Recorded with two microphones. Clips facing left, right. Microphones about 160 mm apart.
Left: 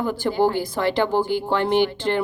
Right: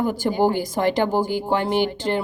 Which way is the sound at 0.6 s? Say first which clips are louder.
Right 1 dB; 45° right (ahead or behind).